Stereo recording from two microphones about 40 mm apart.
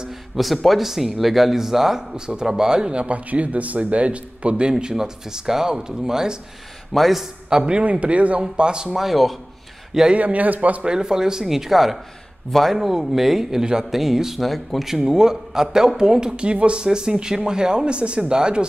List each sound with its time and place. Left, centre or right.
0.4 s speech: centre; by 3.2 s right
3.3 s a man's voice: right; by 6.3 s centre
6.9 s speech: centre
7.4 s speech: centre
7.7 s speech: right
8.4 s a man's voice: right
8.9 s speech: centre
10.1 s speech: right
10.9 s speech: centre
15.0 s a man's voice: centre